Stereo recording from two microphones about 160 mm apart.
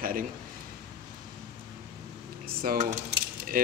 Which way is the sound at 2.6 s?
60° right (ahead or behind).